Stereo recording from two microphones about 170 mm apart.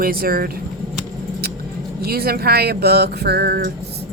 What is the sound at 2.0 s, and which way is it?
Speech, 65° right (ahead or behind).